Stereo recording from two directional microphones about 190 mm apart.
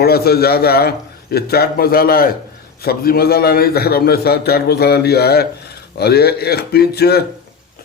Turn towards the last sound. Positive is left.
turn(degrees=60)  # may be behind; listen again after turning